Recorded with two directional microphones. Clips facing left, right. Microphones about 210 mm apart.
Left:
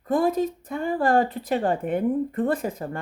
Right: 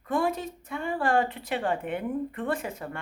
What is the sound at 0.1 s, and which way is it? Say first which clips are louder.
Speech: left 6 dB; 35° left (ahead or behind).